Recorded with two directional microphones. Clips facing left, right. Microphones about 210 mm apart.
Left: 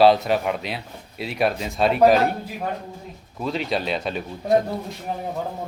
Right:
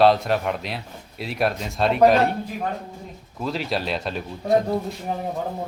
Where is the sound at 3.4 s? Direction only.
Centre (ahead or behind).